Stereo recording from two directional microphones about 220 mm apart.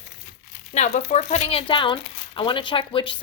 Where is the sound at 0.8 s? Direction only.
30° left (ahead or behind).